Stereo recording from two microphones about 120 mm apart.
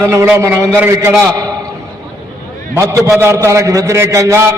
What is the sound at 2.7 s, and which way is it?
A man's voice, 25° right (ahead or behind).